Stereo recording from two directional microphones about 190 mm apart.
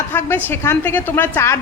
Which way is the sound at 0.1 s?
10° left (ahead or behind).